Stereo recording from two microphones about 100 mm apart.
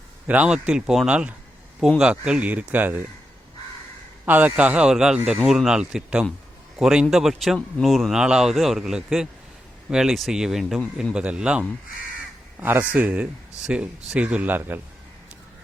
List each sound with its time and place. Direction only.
0.3 s speech: 10° right (ahead or behind)
4.3 s speech: 15° right (ahead or behind); by 11.1 s centre (ahead or behind)
11.1 s speech: 10° right (ahead or behind)
12.5 s speech: 20° right (ahead or behind)